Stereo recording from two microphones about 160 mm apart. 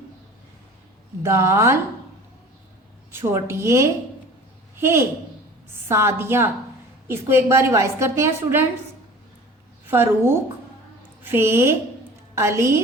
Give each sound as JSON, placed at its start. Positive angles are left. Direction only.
{"t": 1.2, "sound": "a woman's voice", "side_deg": -15}
{"t": 3.1, "sound": "a woman's voice", "side_deg": -15}
{"t": 9.9, "sound": "a woman's voice", "side_deg": -15}